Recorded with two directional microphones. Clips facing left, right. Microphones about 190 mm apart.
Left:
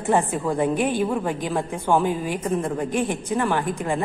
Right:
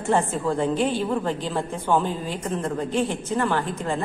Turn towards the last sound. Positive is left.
turn(degrees=15)  # may be behind; listen again after turning